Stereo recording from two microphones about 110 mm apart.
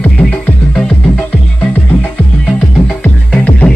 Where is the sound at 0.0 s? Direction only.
15° left (ahead or behind).